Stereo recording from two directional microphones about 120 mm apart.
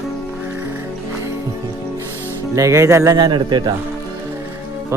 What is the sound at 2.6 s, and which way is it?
Speech, 25° right (ahead or behind).